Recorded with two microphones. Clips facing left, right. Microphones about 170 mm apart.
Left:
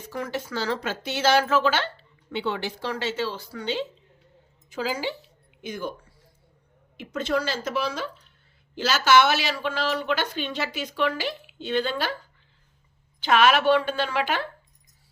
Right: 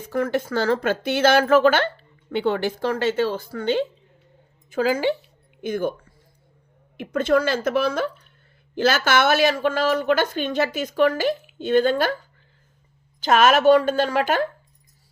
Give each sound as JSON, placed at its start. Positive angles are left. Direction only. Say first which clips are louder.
{"t": 0.0, "sound": "speech", "louder": "right 8 dB", "side_deg": -55}
{"t": 6.9, "sound": "speech", "louder": "right 7 dB", "side_deg": -55}
{"t": 13.1, "sound": "speech", "louder": "right 3 dB", "side_deg": -45}